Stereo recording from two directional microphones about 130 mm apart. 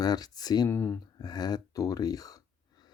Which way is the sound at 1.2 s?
30° left (ahead or behind).